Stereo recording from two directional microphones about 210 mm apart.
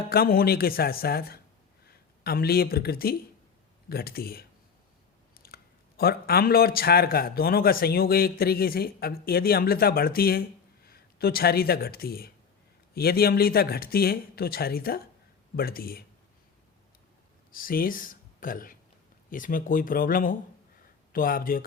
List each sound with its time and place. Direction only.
0.1 s a man's voice: 45° left (ahead or behind)
5.3 s biting: 45° left (ahead or behind)
6.0 s a man's voice: 45° left (ahead or behind)
17.5 s a man's voice: 40° left (ahead or behind)